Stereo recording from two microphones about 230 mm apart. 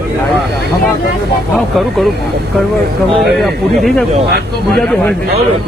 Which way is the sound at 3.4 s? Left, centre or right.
Centre.